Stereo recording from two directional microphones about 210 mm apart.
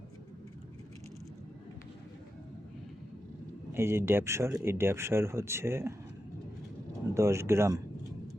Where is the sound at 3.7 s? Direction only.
10° right (ahead or behind).